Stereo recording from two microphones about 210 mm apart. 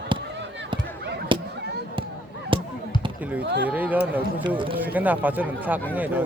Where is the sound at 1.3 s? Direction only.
25° right (ahead or behind).